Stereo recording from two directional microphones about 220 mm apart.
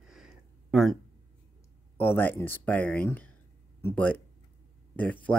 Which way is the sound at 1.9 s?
10° left (ahead or behind).